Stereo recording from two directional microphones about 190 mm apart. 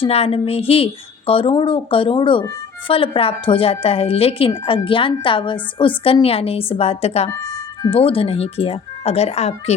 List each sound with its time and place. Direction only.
0.0 s speech: 30° left (ahead or behind)